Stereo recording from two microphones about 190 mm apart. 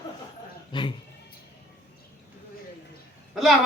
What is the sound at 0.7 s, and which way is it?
Speech, 25° left (ahead or behind).